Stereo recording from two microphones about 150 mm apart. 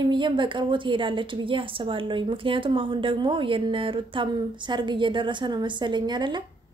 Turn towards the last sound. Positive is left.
turn(degrees=-30)  # may be behind; listen again after turning